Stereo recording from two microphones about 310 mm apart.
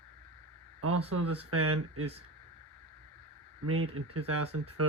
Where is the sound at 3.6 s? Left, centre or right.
Right.